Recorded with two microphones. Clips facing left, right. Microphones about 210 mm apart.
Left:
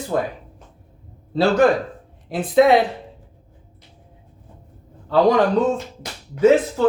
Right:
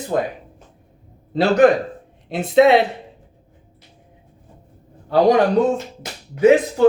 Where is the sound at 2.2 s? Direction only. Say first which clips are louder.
Right 1 dB; 25° right (ahead or behind).